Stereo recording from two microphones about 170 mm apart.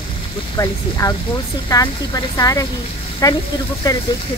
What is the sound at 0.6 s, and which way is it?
Speech, 20° left (ahead or behind).